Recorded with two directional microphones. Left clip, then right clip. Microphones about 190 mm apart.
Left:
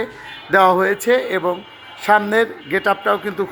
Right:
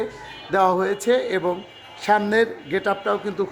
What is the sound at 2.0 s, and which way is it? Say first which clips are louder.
A man's voice: left 4 dB; 5° right (ahead or behind).